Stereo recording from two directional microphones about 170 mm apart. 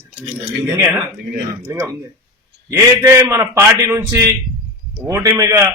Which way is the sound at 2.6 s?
15° right (ahead or behind).